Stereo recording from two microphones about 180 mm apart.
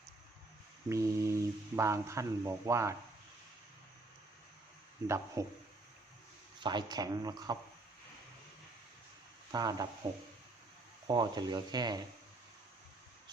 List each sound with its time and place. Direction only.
0.9 s speech: 15° right (ahead or behind)
5.0 s speech: 15° right (ahead or behind)
6.6 s speech: 25° right (ahead or behind)
9.5 s speech: 20° right (ahead or behind)